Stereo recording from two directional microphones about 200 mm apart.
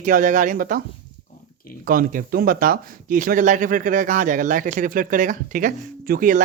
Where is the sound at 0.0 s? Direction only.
40° right (ahead or behind).